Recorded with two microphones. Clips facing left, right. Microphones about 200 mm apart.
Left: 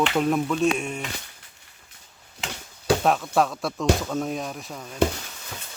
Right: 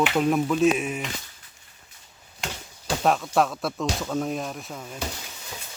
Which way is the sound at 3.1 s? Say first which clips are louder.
Right 4 dB; centre (ahead or behind).